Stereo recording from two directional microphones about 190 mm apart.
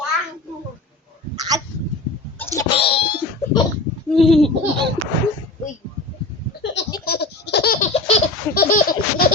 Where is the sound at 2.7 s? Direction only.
30° left (ahead or behind).